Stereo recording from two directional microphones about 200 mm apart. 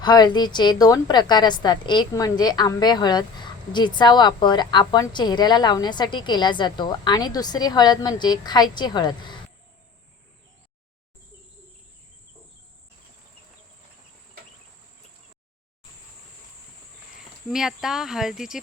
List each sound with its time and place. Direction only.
0.0 s a woman's voice: 20° left (ahead or behind)
17.5 s speech: centre (ahead or behind)